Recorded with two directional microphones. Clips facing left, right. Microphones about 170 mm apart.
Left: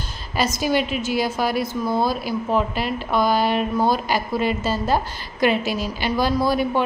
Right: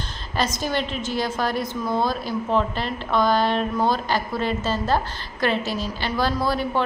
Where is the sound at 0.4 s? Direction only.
10° left (ahead or behind).